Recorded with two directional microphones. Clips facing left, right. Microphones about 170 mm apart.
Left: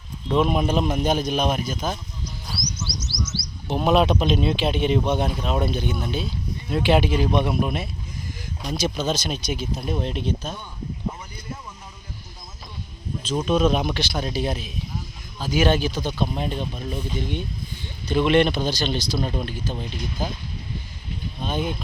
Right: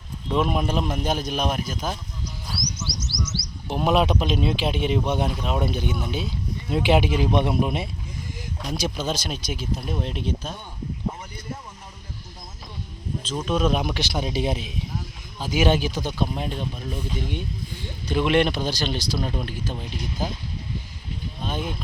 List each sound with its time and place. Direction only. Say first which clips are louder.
0.3 s speech: left 2 dB; 5° right (ahead or behind)
2.5 s bird: right 1 dB; 5° right (ahead or behind)
3.7 s speech: left 2 dB; 10° right (ahead or behind)
5.6 s speech: left 1 dB; 15° right (ahead or behind)
8.7 s speech: left 3 dB; 10° right (ahead or behind)
13.4 s speech: left 2 dB; centre (ahead or behind)
14.1 s speech: right 1 dB; 20° right (ahead or behind)
21.4 s speech: left 3 dB; centre (ahead or behind)